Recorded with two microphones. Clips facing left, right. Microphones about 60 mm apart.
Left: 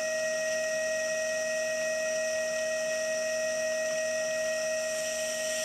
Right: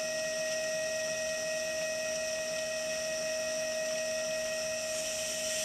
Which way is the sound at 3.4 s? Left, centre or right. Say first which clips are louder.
Left 4 dB; centre.